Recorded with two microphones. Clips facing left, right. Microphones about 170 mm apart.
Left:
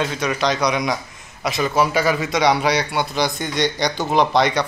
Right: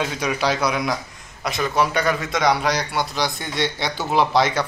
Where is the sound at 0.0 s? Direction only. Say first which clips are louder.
Left 2 dB; 10° right (ahead or behind).